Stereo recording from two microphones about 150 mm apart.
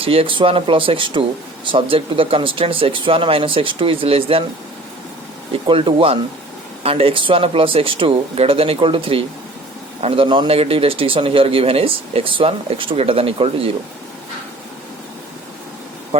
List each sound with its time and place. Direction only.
0.0 s a man's voice: 40° right (ahead or behind)
5.6 s a man's voice: 35° right (ahead or behind)